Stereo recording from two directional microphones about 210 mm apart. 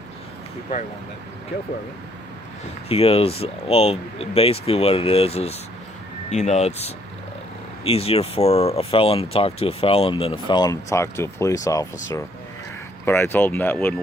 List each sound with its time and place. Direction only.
2.9 s speech: 30° left (ahead or behind)
13.1 s speech: 10° left (ahead or behind)